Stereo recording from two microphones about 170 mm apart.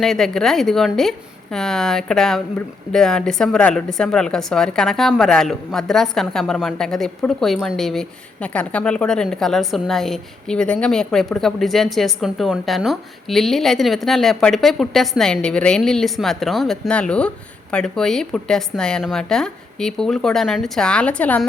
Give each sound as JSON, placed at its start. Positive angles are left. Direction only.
{"t": 0.0, "sound": "speech", "side_deg": 0}